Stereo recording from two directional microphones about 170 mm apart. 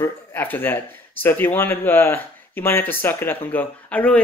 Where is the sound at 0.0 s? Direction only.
15° left (ahead or behind).